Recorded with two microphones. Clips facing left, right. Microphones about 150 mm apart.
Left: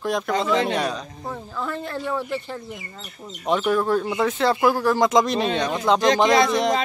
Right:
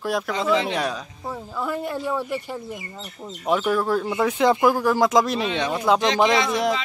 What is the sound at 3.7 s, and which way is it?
Speech, 5° right (ahead or behind).